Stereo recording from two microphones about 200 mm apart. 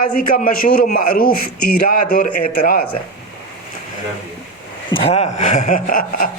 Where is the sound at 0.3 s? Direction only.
45° left (ahead or behind).